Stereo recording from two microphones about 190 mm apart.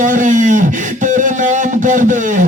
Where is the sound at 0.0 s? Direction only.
40° right (ahead or behind).